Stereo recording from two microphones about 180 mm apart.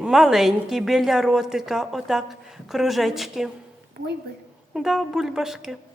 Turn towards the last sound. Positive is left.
turn(degrees=0)  # may be behind; listen again after turning